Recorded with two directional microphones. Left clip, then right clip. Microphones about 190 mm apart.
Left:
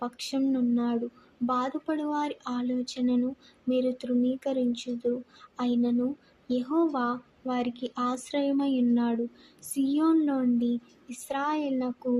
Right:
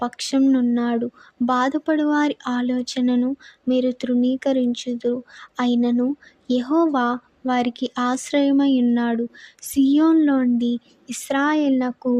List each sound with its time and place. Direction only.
0.0 s a woman's voice: 40° right (ahead or behind)